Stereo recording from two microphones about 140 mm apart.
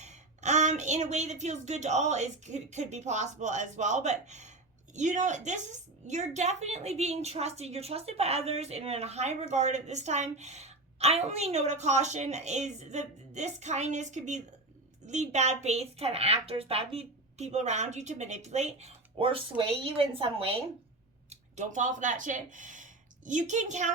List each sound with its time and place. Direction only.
0.0 s a woman's voice: 55° right (ahead or behind); by 20.7 s 40° right (ahead or behind)
21.2 s speech: 60° right (ahead or behind)